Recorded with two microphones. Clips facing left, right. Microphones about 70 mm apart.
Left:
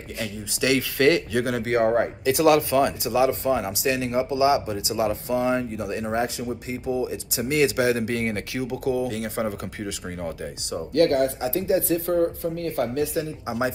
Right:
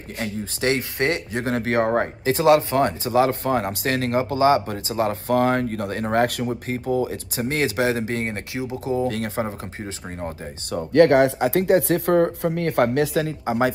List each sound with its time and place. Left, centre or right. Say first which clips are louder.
0.2 s speech: right 2 dB; right
9.0 s speech: right 2 dB; right
10.9 s speech: right 5 dB; right
13.5 s speech: right 5 dB; right